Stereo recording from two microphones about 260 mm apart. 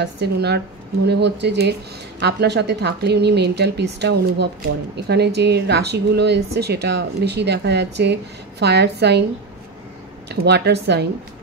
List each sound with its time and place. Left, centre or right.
0.0 s speech: right
10.2 s speech: right